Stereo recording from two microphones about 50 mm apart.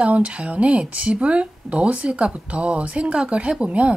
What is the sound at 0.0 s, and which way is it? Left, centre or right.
Speech, right.